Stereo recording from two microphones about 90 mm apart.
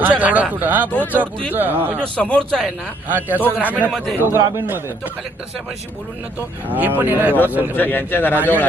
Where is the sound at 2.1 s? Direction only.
10° left (ahead or behind).